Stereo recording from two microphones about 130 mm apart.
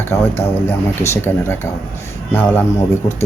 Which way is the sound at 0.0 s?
20° left (ahead or behind).